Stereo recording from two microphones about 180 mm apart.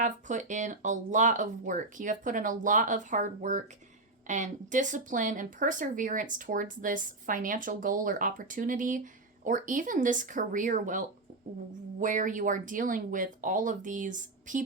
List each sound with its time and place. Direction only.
0.0 s speech: 45° right (ahead or behind)